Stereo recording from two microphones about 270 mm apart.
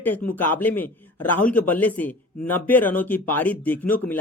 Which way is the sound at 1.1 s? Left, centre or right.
Left.